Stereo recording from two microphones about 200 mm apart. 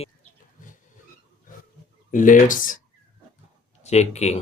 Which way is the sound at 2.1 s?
40° left (ahead or behind).